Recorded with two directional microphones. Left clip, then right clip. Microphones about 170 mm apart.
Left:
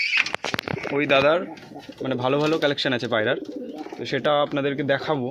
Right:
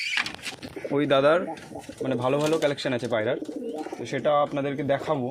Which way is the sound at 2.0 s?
30° left (ahead or behind).